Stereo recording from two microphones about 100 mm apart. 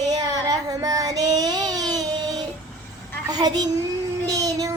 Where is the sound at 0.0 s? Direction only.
40° right (ahead or behind).